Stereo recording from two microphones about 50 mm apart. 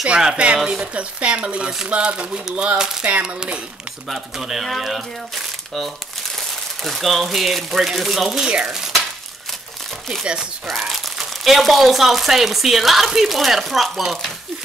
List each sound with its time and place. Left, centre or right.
0.0 s speech: centre
4.1 s speech: centre
10.8 s speech: centre